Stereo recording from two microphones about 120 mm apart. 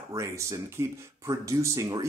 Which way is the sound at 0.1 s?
25° right (ahead or behind).